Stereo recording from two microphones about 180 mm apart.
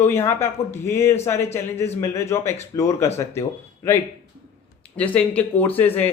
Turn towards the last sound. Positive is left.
turn(degrees=10)  # may be behind; listen again after turning